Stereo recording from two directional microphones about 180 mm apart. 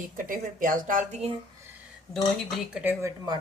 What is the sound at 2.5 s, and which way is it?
Speech, 5° right (ahead or behind).